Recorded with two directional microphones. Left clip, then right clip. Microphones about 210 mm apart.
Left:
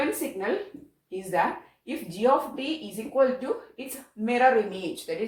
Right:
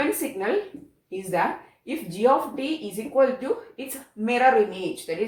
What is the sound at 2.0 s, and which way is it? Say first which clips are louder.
Speech: right 2 dB; 15° left (ahead or behind).